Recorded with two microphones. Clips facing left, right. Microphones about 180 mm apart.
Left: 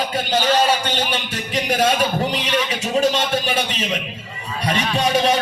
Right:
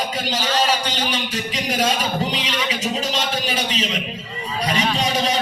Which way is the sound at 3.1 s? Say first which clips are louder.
Left 3 dB; 55° left (ahead or behind).